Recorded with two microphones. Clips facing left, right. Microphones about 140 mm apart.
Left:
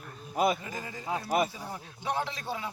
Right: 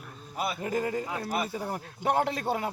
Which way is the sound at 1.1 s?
35° left (ahead or behind).